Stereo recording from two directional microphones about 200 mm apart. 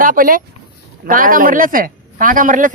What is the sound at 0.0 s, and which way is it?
Speech, 45° right (ahead or behind).